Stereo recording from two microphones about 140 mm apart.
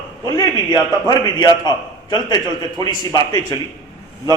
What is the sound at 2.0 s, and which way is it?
A man's voice, 30° left (ahead or behind).